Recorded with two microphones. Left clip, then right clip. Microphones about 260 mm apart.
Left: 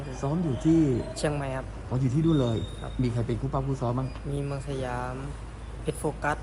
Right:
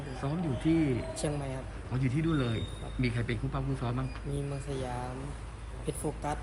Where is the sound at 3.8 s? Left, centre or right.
Centre.